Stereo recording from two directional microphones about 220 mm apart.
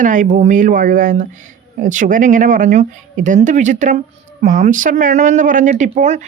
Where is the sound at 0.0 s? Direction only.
35° right (ahead or behind).